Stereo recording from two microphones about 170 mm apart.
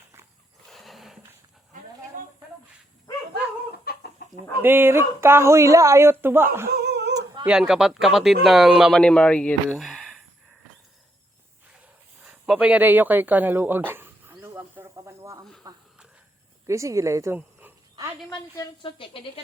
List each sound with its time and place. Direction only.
0.7 s horse: centre (ahead or behind)
2.1 s snake: 50° right (ahead or behind)
3.9 s chicken: 60° left (ahead or behind)
4.6 s speech: 15° right (ahead or behind)
6.7 s a sound: 80° right
7.1 s dog: 20° right (ahead or behind)
7.4 s speech: 5° right (ahead or behind)
12.2 s a sound: 5° right (ahead or behind)
15.6 s speech: 20° right (ahead or behind)
18.3 s speech: 25° left (ahead or behind)